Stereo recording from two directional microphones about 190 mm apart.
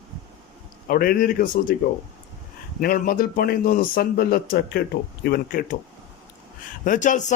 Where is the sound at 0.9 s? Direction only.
50° left (ahead or behind).